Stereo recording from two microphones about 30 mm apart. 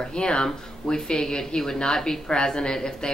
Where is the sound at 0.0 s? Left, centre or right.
Left.